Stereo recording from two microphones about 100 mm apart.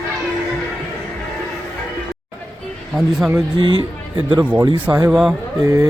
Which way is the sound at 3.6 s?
50° right (ahead or behind).